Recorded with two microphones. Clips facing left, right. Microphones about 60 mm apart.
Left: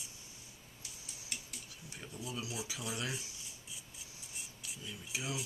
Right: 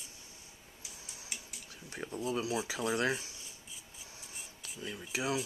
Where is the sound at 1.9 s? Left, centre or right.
Right.